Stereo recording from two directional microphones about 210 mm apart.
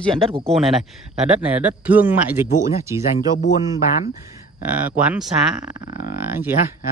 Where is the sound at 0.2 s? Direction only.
25° right (ahead or behind).